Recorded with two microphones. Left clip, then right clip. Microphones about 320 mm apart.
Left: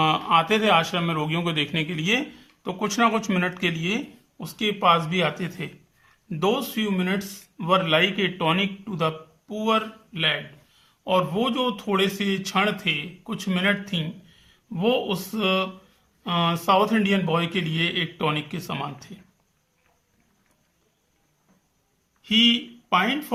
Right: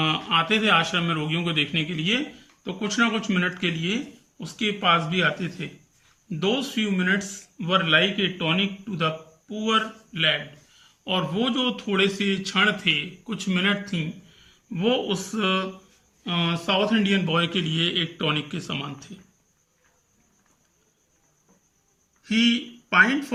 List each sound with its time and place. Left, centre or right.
0.0 s a man's voice: centre
16.2 s a man's voice: centre
22.3 s speech: centre